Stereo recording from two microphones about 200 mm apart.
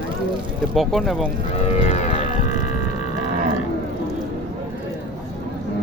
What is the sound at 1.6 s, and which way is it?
Cattle, 30° left (ahead or behind).